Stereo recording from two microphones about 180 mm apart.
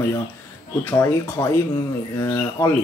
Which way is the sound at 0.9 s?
15° left (ahead or behind).